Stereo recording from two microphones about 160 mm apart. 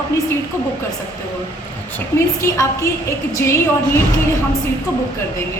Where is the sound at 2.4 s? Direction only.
20° left (ahead or behind).